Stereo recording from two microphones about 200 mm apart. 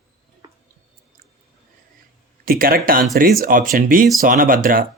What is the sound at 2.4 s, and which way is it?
Speech, 45° right (ahead or behind).